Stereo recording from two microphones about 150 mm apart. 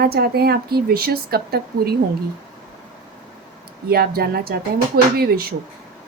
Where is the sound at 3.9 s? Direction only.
90° right.